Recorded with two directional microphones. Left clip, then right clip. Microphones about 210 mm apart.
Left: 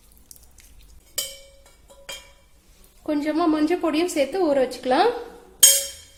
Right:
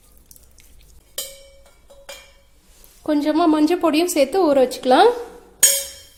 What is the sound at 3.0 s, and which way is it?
A woman's voice, 35° right (ahead or behind).